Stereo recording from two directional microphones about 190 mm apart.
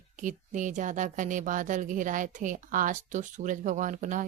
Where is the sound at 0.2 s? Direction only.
40° right (ahead or behind).